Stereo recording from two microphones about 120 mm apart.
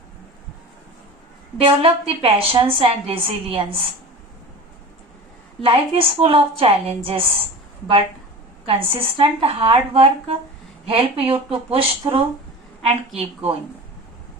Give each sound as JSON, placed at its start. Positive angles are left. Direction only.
{"t": 1.5, "sound": "a woman's voice", "side_deg": -50}
{"t": 5.6, "sound": "a woman's voice", "side_deg": -50}
{"t": 8.6, "sound": "a woman's voice", "side_deg": -50}